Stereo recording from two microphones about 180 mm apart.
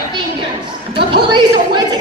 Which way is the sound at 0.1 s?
25° right (ahead or behind).